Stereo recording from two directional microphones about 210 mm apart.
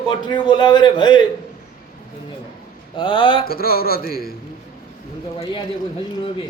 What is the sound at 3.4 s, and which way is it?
Speech, 45° left (ahead or behind).